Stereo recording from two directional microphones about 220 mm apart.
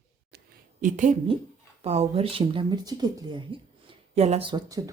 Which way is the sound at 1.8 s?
30° right (ahead or behind).